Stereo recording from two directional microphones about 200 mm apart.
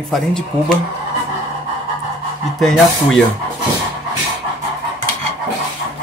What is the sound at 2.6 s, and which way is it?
Speech, centre (ahead or behind).